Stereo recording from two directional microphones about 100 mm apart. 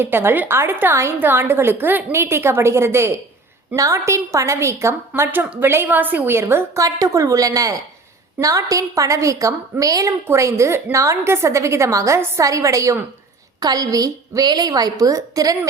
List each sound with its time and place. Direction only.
0.0 s a woman's voice: 25° right (ahead or behind)